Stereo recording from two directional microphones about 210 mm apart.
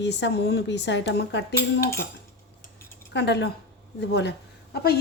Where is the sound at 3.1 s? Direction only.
55° left (ahead or behind).